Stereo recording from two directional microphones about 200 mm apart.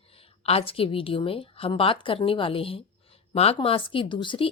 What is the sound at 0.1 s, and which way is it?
A woman's voice, 30° left (ahead or behind).